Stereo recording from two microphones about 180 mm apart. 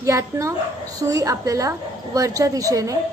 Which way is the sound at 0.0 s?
15° right (ahead or behind).